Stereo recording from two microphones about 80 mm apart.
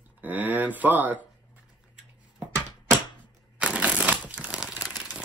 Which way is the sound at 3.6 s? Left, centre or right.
Centre.